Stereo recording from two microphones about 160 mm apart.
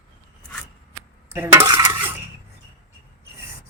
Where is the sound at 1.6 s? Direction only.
20° right (ahead or behind).